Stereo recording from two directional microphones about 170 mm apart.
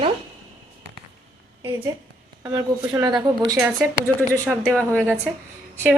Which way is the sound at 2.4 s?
20° right (ahead or behind).